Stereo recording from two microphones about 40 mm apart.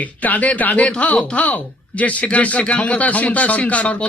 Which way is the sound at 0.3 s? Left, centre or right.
Left.